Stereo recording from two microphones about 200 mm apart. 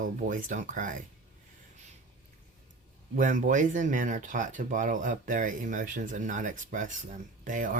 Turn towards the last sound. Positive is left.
turn(degrees=-40)  # may be behind; listen again after turning